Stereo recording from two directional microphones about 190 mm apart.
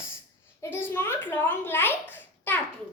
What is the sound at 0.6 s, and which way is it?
A child's voice, 10° left (ahead or behind).